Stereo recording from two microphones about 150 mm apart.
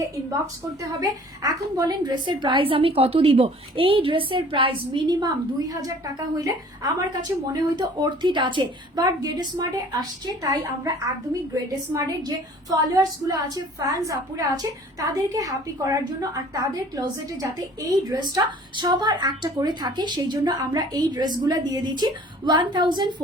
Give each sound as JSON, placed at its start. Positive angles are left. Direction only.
{"t": 1.0, "sound": "a woman's voice", "side_deg": -25}
{"t": 12.7, "sound": "a woman's voice", "side_deg": -25}